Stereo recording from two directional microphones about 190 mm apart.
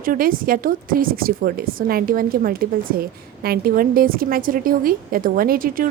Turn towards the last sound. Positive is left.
turn(degrees=-50)  # may be behind; listen again after turning